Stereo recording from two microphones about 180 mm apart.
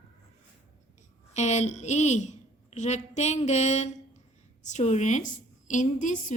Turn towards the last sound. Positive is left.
turn(degrees=45)  # may be behind; listen again after turning